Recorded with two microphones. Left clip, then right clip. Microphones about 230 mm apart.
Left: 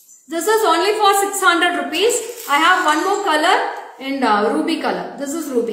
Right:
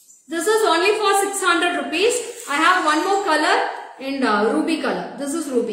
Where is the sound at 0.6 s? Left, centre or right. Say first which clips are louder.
Left 2 dB; centre.